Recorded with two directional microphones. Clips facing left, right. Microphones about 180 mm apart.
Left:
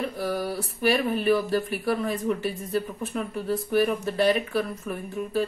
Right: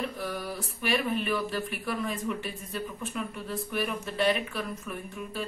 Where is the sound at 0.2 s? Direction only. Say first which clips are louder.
Left 6 dB; 35° left (ahead or behind).